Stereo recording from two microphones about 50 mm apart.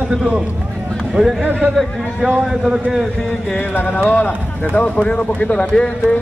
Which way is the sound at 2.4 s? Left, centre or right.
Centre.